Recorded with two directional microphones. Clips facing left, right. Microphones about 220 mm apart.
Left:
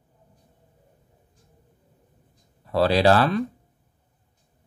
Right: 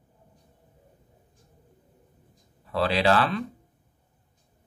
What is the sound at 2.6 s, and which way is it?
Speech, 40° left (ahead or behind).